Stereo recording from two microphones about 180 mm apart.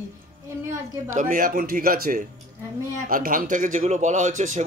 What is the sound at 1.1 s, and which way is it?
A man's voice, 45° right (ahead or behind).